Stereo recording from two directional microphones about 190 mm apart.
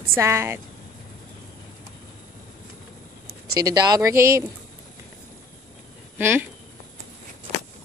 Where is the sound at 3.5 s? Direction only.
20° right (ahead or behind).